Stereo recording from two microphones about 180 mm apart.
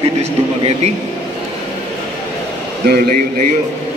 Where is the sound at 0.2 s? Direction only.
35° right (ahead or behind).